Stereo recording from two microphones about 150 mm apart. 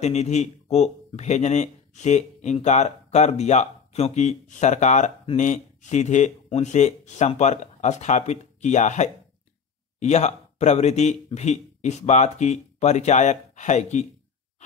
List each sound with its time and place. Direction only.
0.0 s speech: 50° left (ahead or behind)